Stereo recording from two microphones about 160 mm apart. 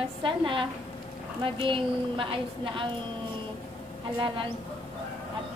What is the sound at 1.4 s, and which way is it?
A woman's voice, 30° right (ahead or behind).